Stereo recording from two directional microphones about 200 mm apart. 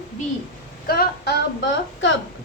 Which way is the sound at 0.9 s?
50° left (ahead or behind).